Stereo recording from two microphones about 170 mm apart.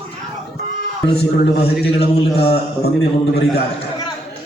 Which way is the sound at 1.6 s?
35° left (ahead or behind).